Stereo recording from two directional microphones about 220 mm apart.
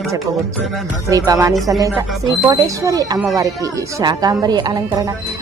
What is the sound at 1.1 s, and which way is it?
A woman's voice, 15° right (ahead or behind).